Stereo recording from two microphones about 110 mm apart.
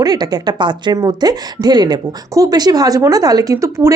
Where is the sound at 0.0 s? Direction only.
35° right (ahead or behind).